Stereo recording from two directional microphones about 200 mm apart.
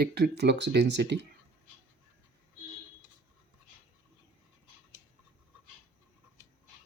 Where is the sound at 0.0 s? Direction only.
55° right (ahead or behind).